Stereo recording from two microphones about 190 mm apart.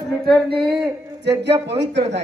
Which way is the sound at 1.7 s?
65° right (ahead or behind).